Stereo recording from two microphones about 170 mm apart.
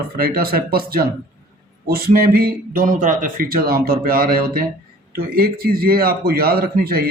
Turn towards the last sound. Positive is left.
turn(degrees=-60)  # may be behind; listen again after turning